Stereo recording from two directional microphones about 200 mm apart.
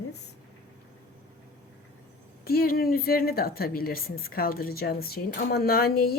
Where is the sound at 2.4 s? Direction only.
50° left (ahead or behind).